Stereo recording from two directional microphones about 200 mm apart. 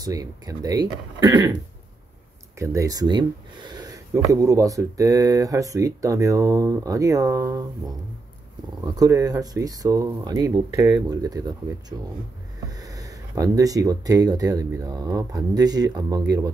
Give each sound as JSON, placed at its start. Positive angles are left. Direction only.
{"t": 0.0, "sound": "speech", "side_deg": -15}
{"t": 2.6, "sound": "speech", "side_deg": -15}
{"t": 8.8, "sound": "speech", "side_deg": -20}
{"t": 12.5, "sound": "speech", "side_deg": -20}